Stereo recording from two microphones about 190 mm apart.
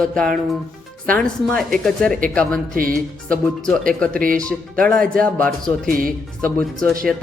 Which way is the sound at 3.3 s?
5° left (ahead or behind).